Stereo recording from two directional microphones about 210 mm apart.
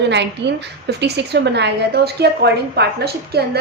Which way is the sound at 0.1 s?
55° right (ahead or behind).